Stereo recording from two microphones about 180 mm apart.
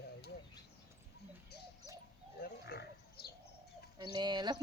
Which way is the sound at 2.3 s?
60° left (ahead or behind).